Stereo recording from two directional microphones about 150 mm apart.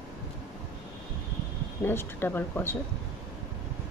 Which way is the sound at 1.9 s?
15° left (ahead or behind).